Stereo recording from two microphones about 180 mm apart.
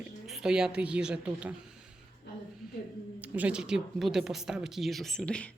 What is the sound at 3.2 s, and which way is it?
A woman's voice, 5° right (ahead or behind).